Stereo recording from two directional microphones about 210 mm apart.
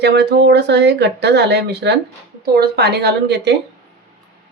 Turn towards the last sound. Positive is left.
turn(degrees=-50)  # may be behind; listen again after turning